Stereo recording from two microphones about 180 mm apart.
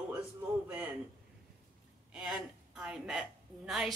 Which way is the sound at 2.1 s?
5° right (ahead or behind).